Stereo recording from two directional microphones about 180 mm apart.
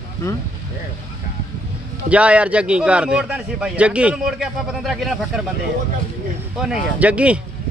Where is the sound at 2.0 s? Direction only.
5° right (ahead or behind).